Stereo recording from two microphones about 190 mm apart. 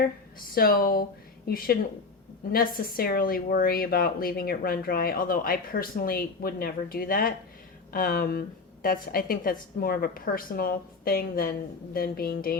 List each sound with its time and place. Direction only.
0.0 s a woman's voice: 50° left (ahead or behind)